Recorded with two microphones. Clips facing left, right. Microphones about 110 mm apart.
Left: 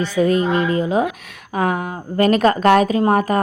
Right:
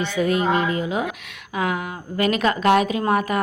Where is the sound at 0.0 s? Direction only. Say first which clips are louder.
Left 4 dB; 40° left (ahead or behind).